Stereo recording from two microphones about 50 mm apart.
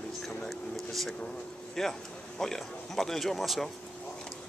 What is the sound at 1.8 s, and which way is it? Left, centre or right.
Speech, centre.